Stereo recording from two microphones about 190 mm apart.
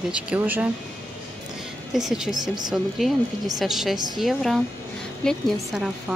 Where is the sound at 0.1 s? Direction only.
10° right (ahead or behind).